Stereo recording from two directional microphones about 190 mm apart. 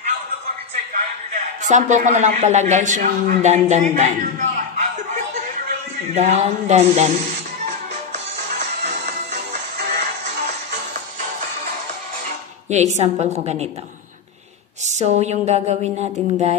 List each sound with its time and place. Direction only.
0.9 s a man's voice: 40° right (ahead or behind)
6.1 s a man's voice: 35° right (ahead or behind)
7.6 s music: 45° right (ahead or behind)
12.6 s a man's voice: 35° right (ahead or behind)
14.9 s a man's voice: 35° right (ahead or behind)